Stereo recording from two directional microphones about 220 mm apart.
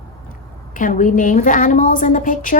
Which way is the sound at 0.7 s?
35° left (ahead or behind).